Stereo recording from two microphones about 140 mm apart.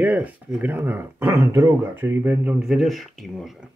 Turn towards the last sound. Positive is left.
turn(degrees=0)  # may be behind; listen again after turning